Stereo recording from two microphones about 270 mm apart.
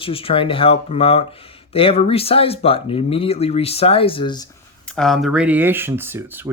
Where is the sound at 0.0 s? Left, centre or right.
Centre.